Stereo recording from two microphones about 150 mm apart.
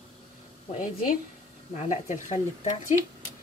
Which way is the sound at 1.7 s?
50° left (ahead or behind).